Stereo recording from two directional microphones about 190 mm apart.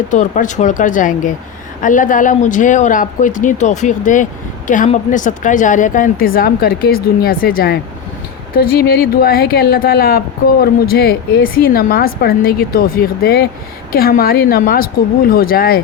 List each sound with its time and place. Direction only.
0.1 s speech: 40° left (ahead or behind)